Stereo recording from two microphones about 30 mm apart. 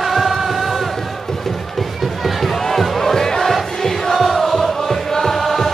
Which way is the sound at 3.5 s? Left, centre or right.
Centre.